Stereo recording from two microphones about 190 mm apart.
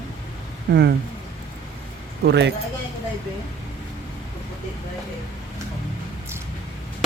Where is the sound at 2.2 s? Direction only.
65° right (ahead or behind).